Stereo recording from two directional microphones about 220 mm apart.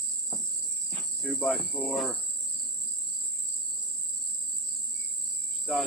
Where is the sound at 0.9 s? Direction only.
5° left (ahead or behind).